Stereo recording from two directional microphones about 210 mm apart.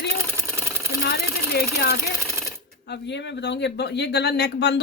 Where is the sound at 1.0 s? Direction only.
50° left (ahead or behind).